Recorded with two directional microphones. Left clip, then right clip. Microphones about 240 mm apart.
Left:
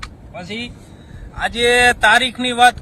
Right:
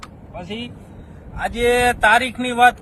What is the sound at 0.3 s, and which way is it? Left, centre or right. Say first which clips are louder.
A man's voice: left 3 dB; centre.